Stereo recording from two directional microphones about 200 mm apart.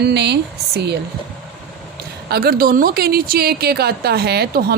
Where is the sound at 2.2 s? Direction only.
50° right (ahead or behind).